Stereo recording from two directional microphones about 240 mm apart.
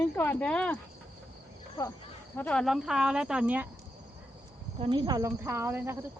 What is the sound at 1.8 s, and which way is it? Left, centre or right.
Speech, centre.